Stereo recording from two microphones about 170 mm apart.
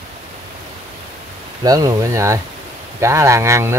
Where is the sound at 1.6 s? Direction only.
20° right (ahead or behind).